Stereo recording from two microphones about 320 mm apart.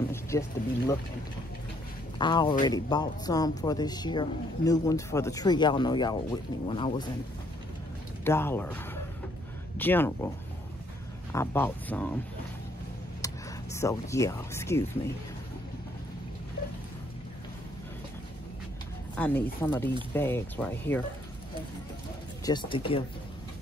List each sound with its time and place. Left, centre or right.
0.1 s speech: centre
2.1 s a man's voice: centre
8.2 s a man's voice: centre
11.3 s a man's voice: centre
13.2 s speech: centre
19.1 s a man's voice: centre
22.4 s a man's voice: centre